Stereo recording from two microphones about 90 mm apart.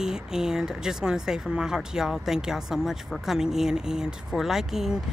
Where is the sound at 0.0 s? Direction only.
5° right (ahead or behind).